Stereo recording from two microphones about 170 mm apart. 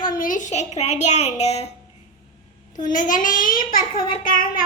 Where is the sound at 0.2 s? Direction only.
50° left (ahead or behind).